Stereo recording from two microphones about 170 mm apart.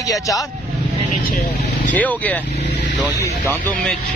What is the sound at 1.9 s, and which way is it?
Speech, 10° left (ahead or behind).